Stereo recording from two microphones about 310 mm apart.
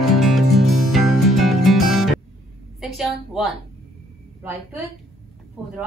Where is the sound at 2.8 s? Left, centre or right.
Centre.